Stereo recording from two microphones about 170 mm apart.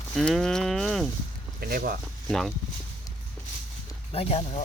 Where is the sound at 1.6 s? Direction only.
60° right (ahead or behind).